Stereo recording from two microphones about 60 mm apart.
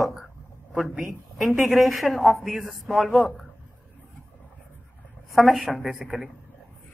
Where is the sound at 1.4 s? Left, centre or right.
Centre.